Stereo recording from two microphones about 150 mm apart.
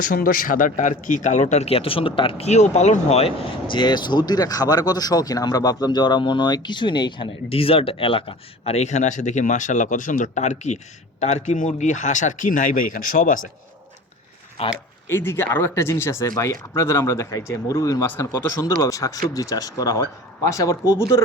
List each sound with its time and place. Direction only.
0.1 s speech: 70° left (ahead or behind)
14.6 s speech: 40° left (ahead or behind)
15.0 s speech: 15° left (ahead or behind)